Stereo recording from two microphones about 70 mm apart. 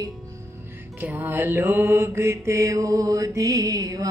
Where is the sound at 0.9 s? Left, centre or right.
Right.